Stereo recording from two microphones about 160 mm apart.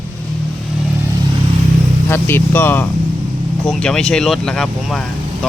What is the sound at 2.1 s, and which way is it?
Speech, 15° left (ahead or behind).